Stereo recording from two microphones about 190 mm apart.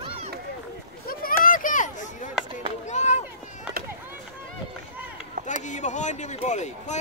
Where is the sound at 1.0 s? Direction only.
45° left (ahead or behind).